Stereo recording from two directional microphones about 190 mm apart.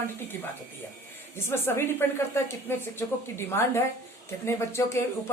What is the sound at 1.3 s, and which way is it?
Speech, 10° left (ahead or behind).